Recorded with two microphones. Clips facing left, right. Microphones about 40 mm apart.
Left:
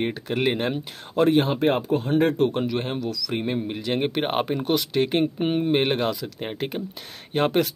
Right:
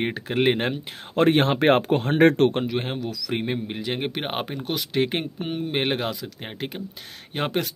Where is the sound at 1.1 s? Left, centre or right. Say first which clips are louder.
Even; right.